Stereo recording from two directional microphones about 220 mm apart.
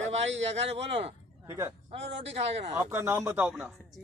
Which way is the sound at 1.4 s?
15° right (ahead or behind).